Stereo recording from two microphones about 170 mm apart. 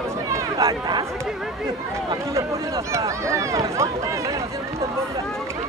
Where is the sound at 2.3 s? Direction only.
15° right (ahead or behind).